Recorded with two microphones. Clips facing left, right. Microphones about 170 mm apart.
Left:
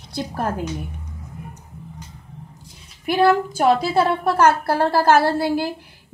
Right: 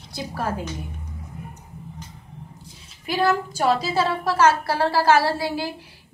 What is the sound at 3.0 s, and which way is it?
A woman's voice, 55° left (ahead or behind).